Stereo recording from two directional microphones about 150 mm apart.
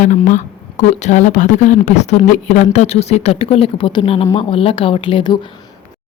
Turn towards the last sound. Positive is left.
turn(degrees=30)  # may be behind; listen again after turning